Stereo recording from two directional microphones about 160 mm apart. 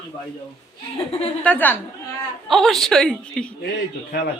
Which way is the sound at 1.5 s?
10° left (ahead or behind).